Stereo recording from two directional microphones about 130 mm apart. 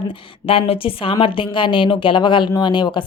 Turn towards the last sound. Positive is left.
turn(degrees=35)  # may be behind; listen again after turning